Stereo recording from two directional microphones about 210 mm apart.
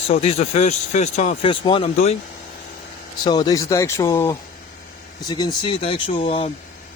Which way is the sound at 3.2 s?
20° left (ahead or behind).